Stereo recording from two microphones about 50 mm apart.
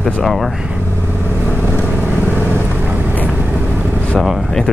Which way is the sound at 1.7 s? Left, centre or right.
Left.